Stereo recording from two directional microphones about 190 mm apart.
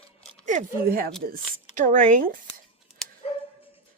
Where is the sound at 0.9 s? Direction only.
50° right (ahead or behind).